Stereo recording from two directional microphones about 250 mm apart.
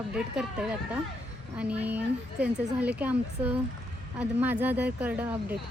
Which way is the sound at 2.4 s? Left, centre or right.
Centre.